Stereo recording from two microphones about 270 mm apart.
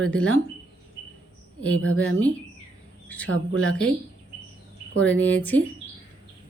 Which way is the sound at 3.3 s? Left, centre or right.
Right.